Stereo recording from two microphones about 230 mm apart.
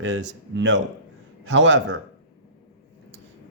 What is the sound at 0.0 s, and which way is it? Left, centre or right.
Speech, right.